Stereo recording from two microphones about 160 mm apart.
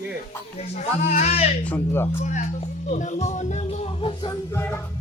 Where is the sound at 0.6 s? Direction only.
45° left (ahead or behind).